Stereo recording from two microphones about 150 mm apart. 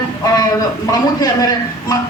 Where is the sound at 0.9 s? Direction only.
25° left (ahead or behind).